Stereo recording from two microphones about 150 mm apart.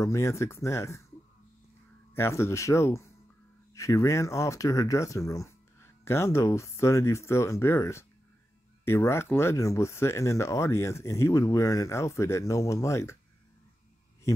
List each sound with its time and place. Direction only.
0.0 s speech: 20° left (ahead or behind)
2.1 s speech: 15° left (ahead or behind)